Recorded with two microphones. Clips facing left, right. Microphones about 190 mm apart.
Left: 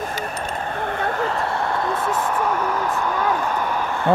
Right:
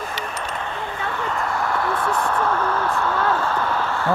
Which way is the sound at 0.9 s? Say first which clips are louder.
Left 3 dB; 45° left (ahead or behind).